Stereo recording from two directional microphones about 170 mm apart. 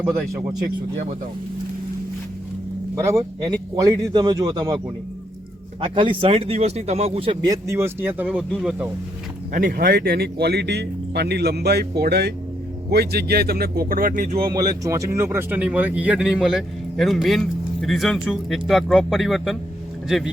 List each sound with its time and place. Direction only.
3.4 s speech: 20° right (ahead or behind)
5.8 s speech: 30° right (ahead or behind)
7.4 s speech: 20° right (ahead or behind)
9.5 s speech: 55° right (ahead or behind)
14.3 s speech: 25° right (ahead or behind); by 20.3 s centre (ahead or behind)